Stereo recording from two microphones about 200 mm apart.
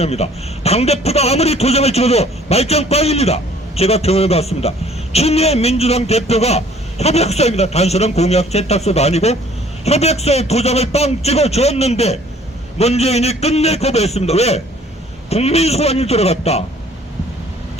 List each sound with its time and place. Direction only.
0.0 s a man's voice: 30° left (ahead or behind)